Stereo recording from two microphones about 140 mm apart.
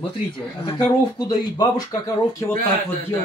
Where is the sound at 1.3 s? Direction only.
30° left (ahead or behind).